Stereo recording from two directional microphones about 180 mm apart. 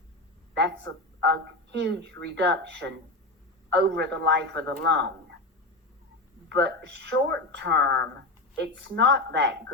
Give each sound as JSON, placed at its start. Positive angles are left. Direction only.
{"t": 1.7, "sound": "a man's voice", "side_deg": -70}
{"t": 6.5, "sound": "a man's voice", "side_deg": -70}